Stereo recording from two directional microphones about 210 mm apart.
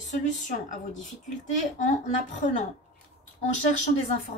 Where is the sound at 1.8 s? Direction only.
35° left (ahead or behind).